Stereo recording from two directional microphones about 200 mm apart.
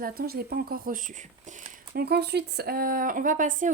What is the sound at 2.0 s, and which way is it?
Speech, 55° right (ahead or behind).